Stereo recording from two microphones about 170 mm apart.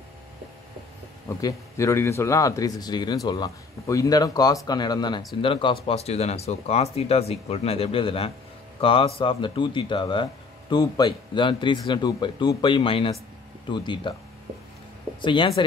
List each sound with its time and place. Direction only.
1.4 s speech: 15° left (ahead or behind)
15.2 s speech: 30° left (ahead or behind)